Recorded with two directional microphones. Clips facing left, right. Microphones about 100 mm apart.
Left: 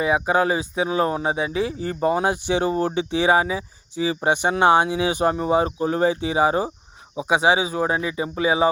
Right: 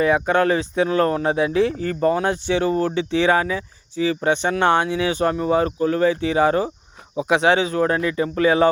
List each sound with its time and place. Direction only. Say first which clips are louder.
0.0 s speech: right 2 dB; 10° left (ahead or behind)
1.8 s speech: right 1 dB; 15° left (ahead or behind)
7.2 s speech: right 2 dB; 5° left (ahead or behind)